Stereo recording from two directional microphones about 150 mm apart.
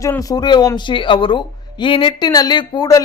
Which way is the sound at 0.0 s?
20° left (ahead or behind).